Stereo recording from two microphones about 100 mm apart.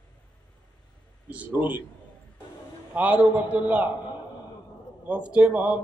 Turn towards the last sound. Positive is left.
turn(degrees=-15)  # may be behind; listen again after turning